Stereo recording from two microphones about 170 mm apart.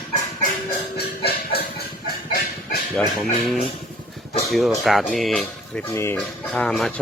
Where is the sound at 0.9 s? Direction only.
70° left (ahead or behind).